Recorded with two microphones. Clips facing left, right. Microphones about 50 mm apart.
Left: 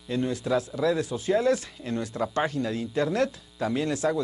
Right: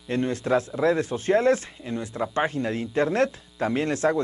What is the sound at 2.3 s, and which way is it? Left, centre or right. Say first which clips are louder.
Speech: right 3 dB; right.